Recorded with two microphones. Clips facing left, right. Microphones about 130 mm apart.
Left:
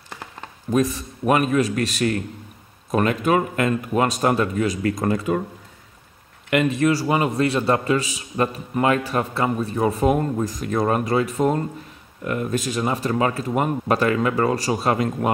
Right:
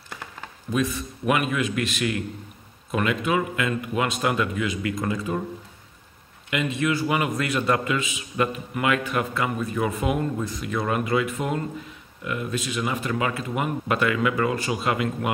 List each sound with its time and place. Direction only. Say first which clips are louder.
0.7 s a man's voice: left 5 dB; 40° left (ahead or behind)
6.5 s a man's voice: left 6 dB; 45° left (ahead or behind)